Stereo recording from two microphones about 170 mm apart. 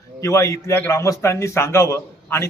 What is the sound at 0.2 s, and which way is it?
A man's voice, 15° left (ahead or behind).